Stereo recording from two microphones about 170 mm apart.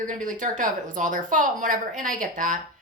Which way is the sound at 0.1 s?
50° right (ahead or behind).